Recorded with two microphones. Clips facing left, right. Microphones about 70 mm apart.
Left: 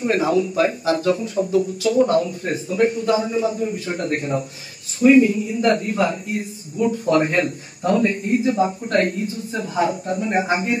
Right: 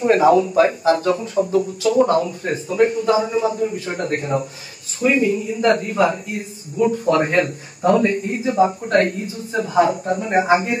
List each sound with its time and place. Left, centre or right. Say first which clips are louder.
0.0 s speech: right 5 dB; right
8.5 s speech: right 4 dB; right
9.5 s speech: right 6 dB; right